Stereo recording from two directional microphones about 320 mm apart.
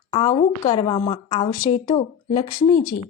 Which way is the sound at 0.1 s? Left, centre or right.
Centre.